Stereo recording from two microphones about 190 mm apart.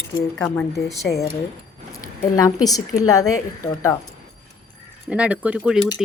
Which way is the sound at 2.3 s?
20° left (ahead or behind).